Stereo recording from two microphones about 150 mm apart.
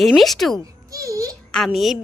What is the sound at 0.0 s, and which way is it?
Speech, centre (ahead or behind).